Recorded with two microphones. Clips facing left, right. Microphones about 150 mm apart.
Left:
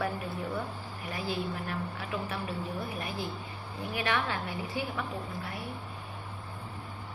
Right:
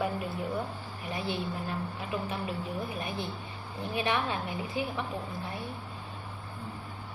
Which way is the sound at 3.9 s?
20° right (ahead or behind).